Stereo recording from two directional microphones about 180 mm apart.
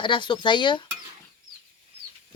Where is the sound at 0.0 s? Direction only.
25° left (ahead or behind).